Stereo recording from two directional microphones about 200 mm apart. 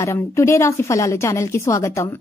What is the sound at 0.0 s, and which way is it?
Speech, 15° left (ahead or behind).